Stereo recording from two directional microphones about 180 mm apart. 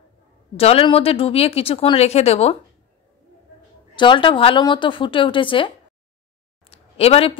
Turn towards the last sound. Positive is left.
turn(degrees=30)  # may be behind; listen again after turning